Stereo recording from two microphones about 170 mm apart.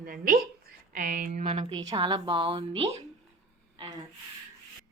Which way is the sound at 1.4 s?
30° right (ahead or behind).